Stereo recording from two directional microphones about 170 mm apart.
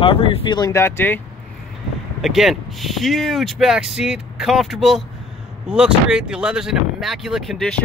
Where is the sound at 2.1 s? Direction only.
Centre (ahead or behind).